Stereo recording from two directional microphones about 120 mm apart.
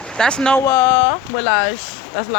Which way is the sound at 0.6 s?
20° left (ahead or behind).